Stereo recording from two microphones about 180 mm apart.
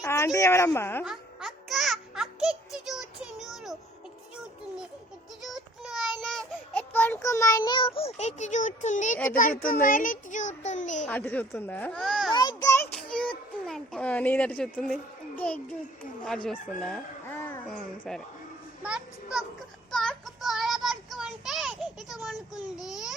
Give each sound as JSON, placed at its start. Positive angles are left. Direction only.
{"t": 0.0, "sound": "a sound", "side_deg": 15}
{"t": 0.3, "sound": "speech", "side_deg": 15}
{"t": 1.0, "sound": "music", "side_deg": 0}
{"t": 5.4, "sound": "child singing", "side_deg": 0}
{"t": 8.4, "sound": "speech", "side_deg": 40}
{"t": 9.8, "sound": "child singing", "side_deg": 50}
{"t": 11.0, "sound": "speech", "side_deg": 10}
{"t": 12.3, "sound": "a sound", "side_deg": 20}
{"t": 12.9, "sound": "a sound", "side_deg": 5}
{"t": 15.4, "sound": "speech", "side_deg": 10}
{"t": 16.2, "sound": "chicken", "side_deg": 5}
{"t": 17.7, "sound": "a child's voice", "side_deg": 5}
{"t": 19.9, "sound": "child singing", "side_deg": 5}